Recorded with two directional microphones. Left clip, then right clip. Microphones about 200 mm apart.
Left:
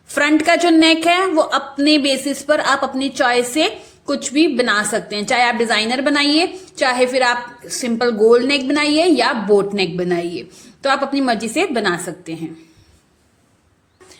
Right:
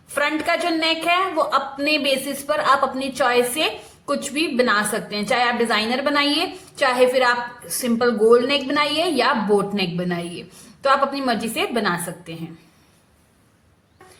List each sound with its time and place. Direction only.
0.1 s a woman's voice: 30° left (ahead or behind)